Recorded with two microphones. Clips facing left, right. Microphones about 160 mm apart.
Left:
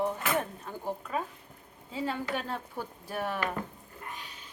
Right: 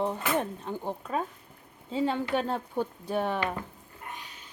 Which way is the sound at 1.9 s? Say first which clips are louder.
Right 5 dB; 25° right (ahead or behind).